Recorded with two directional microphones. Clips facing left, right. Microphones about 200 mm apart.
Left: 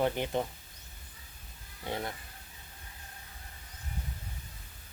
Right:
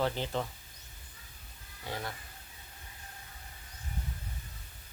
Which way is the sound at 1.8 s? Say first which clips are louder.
Left 3 dB; 20° left (ahead or behind).